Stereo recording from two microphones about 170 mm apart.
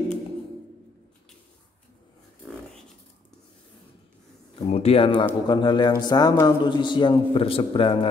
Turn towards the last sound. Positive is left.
turn(degrees=30)  # may be behind; listen again after turning